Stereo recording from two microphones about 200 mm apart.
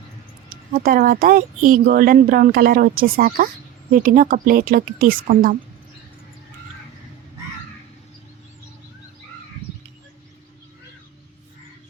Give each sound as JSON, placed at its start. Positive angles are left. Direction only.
{"t": 0.5, "sound": "speech", "side_deg": -45}